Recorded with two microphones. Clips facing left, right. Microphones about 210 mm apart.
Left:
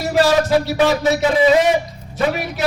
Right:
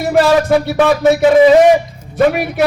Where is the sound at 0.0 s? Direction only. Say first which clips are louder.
Right 4 dB; 55° right (ahead or behind).